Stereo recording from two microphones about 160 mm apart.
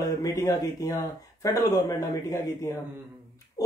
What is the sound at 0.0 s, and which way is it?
Speech, 20° left (ahead or behind).